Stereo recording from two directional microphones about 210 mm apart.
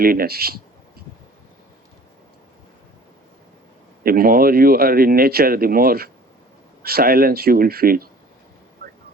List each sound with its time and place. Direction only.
0.0 s speech: 45° right (ahead or behind)
4.0 s speech: 45° right (ahead or behind)